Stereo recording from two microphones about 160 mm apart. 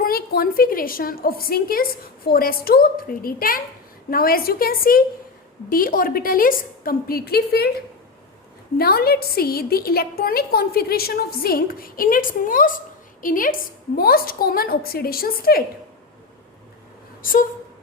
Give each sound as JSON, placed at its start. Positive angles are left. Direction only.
{"t": 0.0, "sound": "a woman's voice", "side_deg": 70}
{"t": 8.8, "sound": "a woman's voice", "side_deg": 75}